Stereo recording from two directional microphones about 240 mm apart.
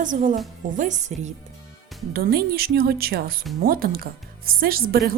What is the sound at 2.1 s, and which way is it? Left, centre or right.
A woman's voice, right.